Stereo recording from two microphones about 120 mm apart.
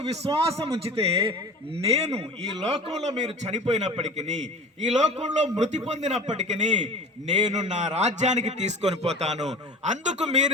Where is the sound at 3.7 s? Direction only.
65° right (ahead or behind).